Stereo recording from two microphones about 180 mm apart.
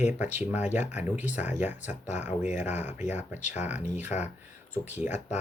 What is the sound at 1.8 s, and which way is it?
Speech, 40° left (ahead or behind).